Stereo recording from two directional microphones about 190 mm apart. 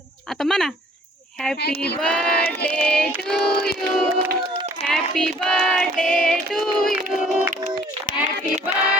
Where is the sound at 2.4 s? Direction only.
55° left (ahead or behind).